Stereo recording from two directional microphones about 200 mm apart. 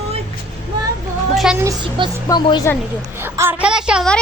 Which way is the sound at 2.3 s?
20° left (ahead or behind).